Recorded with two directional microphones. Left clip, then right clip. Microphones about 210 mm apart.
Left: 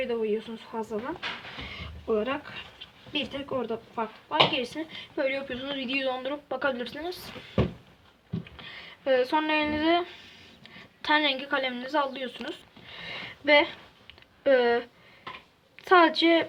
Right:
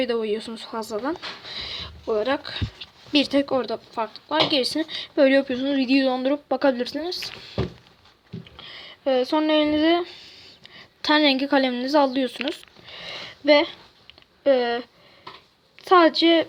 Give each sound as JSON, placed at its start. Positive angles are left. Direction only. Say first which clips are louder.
{"t": 0.0, "sound": "speech", "louder": "right 4 dB", "side_deg": -40}
{"t": 8.5, "sound": "a sound", "louder": "right 3 dB", "side_deg": -20}
{"t": 14.4, "sound": "speech", "louder": "right 2 dB", "side_deg": -15}